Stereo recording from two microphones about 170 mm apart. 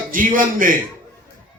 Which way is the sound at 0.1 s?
55° right (ahead or behind).